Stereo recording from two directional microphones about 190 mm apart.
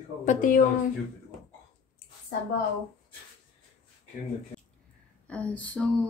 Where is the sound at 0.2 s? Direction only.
45° left (ahead or behind).